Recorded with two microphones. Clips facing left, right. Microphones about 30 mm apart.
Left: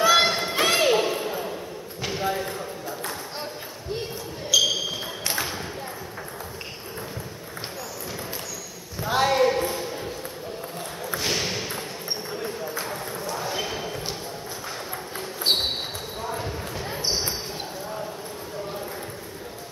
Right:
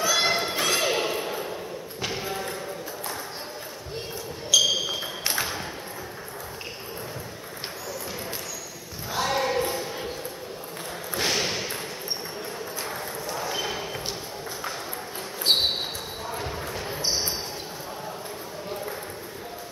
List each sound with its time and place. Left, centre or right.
0.0 s run: left
0.3 s run: centre
0.6 s music: centre
1.0 s ping: centre
2.0 s basketball bounce: centre
4.5 s basketball bounce: centre
5.3 s ping: centre
9.2 s basketball bounce: centre
9.5 s a sound: centre
11.2 s a sound: centre
12.7 s run: centre
13.6 s a sound: centre
15.5 s a sound: centre
16.3 s basketball bounce: centre